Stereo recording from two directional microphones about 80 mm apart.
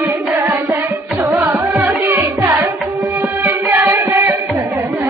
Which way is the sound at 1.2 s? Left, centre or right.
Right.